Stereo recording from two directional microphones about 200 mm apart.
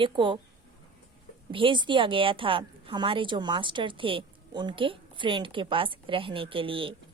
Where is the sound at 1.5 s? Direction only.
25° right (ahead or behind).